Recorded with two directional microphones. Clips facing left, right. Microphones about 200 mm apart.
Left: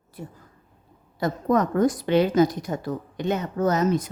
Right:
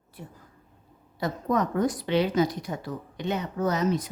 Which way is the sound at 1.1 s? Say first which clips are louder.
Left 4 dB; 45° left (ahead or behind).